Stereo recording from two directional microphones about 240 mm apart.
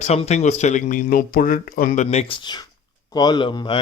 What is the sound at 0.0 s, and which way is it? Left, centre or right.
Speech, left.